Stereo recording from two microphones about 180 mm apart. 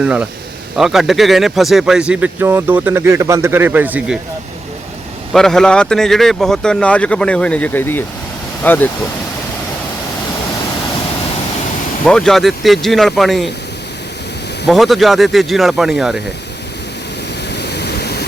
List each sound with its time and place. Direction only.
0.0 s speech: 5° right (ahead or behind)
5.3 s speech: 5° left (ahead or behind)
12.0 s speech: 5° left (ahead or behind)
14.7 s speech: centre (ahead or behind)
17.5 s a sound: 65° left (ahead or behind)